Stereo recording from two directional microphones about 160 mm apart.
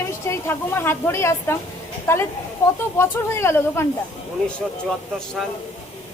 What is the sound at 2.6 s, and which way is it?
Speech, 15° left (ahead or behind).